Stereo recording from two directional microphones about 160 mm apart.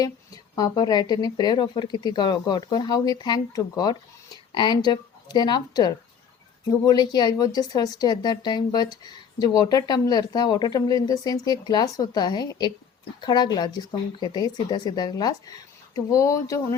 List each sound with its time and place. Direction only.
0.5 s a woman's voice: 25° left (ahead or behind)